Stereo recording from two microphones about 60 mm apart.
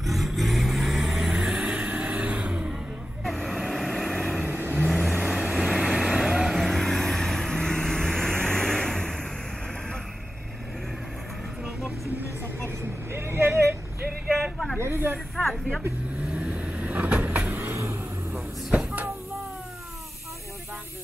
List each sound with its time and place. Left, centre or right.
0.0 s vehicle: centre
3.3 s vehicle: centre
4.5 s vehicle: right
5.2 s vehicle: centre
12.6 s vehicle: right
14.4 s a sound: centre
14.8 s snake: right
16.2 s vehicle: centre; by 17.7 s right
18.7 s a sound: right